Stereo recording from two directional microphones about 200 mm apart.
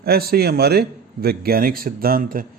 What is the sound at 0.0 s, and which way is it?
Speech, 50° right (ahead or behind).